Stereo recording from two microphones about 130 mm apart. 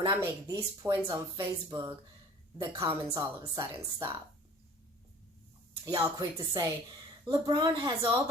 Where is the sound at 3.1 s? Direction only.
20° right (ahead or behind).